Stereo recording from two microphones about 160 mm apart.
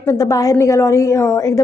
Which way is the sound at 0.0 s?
20° left (ahead or behind).